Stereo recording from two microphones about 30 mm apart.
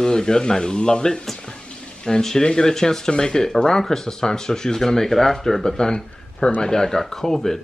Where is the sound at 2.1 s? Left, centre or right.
Centre.